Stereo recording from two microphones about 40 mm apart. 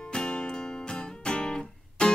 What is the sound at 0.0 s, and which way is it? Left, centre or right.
Music, left.